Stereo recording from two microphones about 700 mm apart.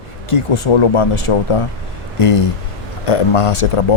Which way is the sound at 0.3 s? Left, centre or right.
Left.